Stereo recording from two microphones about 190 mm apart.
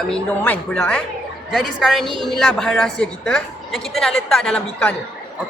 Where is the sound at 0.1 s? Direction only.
5° left (ahead or behind).